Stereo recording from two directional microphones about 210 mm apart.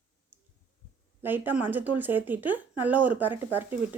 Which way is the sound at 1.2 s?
10° right (ahead or behind).